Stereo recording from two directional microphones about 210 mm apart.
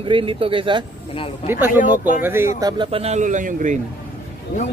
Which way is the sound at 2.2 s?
10° right (ahead or behind).